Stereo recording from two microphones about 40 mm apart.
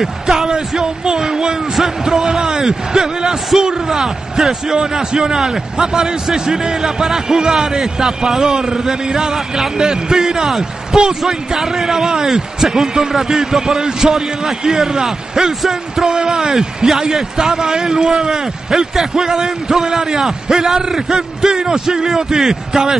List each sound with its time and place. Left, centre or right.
0.0 s speech: centre
0.5 s a sound: centre
3.6 s a man's voice: centre